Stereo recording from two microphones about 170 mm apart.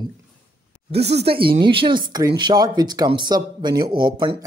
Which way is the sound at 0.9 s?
35° right (ahead or behind).